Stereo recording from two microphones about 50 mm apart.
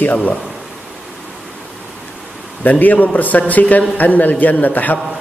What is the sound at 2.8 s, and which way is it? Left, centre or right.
Speech, left.